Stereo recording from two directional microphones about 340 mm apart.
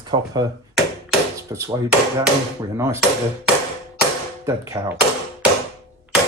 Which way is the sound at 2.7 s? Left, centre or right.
Centre.